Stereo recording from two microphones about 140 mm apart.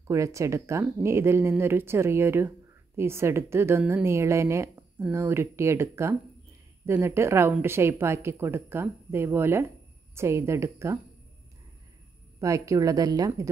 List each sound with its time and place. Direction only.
0.1 s a woman's voice: 20° right (ahead or behind)
12.4 s a woman's voice: 25° right (ahead or behind)